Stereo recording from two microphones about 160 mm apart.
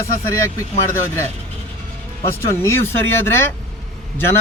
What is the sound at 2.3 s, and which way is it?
A man's voice, 15° left (ahead or behind).